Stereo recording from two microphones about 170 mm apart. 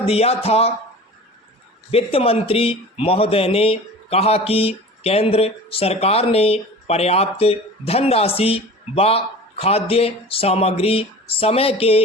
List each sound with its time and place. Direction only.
0.0 s speech: 35° left (ahead or behind)
1.9 s speech: 35° left (ahead or behind)